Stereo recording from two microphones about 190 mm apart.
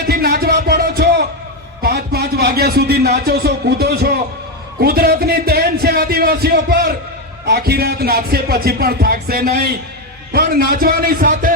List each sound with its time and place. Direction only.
0.1 s music: 55° right (ahead or behind)
1.8 s a man's voice: 55° right (ahead or behind)